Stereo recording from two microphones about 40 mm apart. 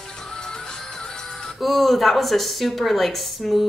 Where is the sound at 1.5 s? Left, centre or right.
Centre.